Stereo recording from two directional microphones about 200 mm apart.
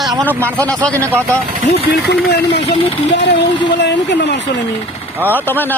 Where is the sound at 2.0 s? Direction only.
55° left (ahead or behind).